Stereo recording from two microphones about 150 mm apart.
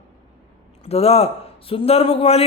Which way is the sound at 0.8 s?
40° left (ahead or behind).